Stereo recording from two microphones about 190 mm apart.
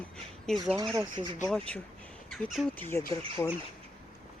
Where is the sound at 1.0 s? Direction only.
25° right (ahead or behind).